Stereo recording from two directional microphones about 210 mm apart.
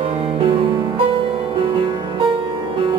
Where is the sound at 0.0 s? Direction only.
25° right (ahead or behind).